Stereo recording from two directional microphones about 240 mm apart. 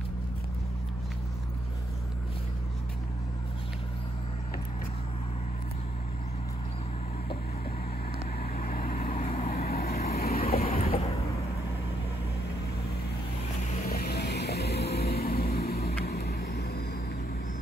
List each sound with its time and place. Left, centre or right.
8.5 s vehicle: left
9.6 s vehicle: left
10.6 s a sound: left
13.8 s vehicle: left